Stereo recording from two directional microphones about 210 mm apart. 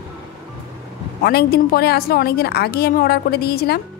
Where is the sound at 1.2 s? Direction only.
50° left (ahead or behind).